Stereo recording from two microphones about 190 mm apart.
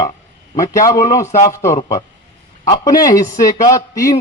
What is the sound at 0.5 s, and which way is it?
A man's voice, 15° left (ahead or behind).